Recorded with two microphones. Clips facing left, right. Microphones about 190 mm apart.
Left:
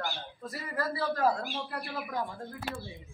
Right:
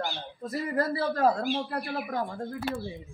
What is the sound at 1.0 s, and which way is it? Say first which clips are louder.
Speech: right 1 dB; 40° right (ahead or behind).